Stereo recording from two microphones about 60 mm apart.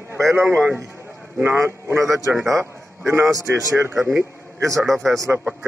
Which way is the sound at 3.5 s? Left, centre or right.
Right.